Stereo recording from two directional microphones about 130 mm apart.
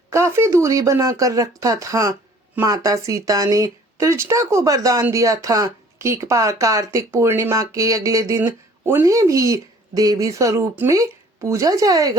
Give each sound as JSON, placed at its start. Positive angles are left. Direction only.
{"t": 0.1, "sound": "speech", "side_deg": -20}